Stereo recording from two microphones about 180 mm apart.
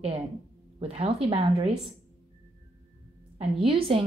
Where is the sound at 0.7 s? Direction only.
30° right (ahead or behind).